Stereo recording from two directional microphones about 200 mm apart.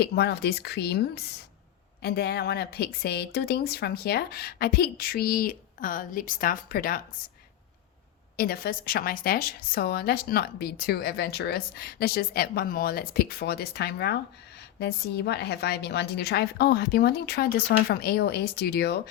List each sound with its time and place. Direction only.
0.0 s a woman's voice: 55° left (ahead or behind)
8.4 s a woman's voice: 50° left (ahead or behind)